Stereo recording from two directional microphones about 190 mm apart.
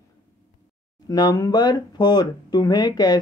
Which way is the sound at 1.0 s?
20° left (ahead or behind).